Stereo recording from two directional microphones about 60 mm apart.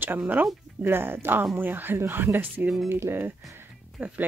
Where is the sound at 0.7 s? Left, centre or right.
Right.